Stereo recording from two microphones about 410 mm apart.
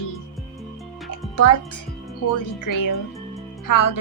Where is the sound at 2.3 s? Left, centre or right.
Left.